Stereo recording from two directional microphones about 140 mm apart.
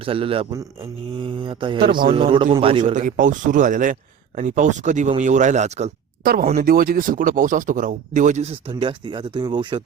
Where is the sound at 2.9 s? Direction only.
70° right (ahead or behind); by 5.9 s 55° right (ahead or behind).